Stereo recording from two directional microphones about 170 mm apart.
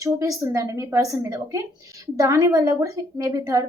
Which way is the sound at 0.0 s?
20° right (ahead or behind).